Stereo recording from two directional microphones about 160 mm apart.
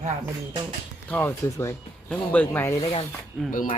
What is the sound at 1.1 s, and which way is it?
Speech, 15° left (ahead or behind).